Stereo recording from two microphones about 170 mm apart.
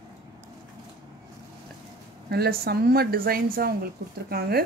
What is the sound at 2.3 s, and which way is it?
Speech, 70° right (ahead or behind).